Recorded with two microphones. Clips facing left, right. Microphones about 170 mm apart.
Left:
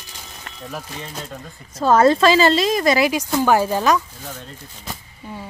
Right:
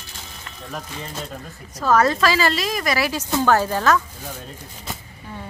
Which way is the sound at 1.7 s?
25° left (ahead or behind).